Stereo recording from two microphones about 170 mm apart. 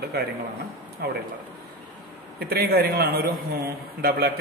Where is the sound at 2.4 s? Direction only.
65° right (ahead or behind).